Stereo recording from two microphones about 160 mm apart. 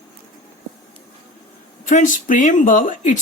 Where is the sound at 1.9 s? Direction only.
50° left (ahead or behind).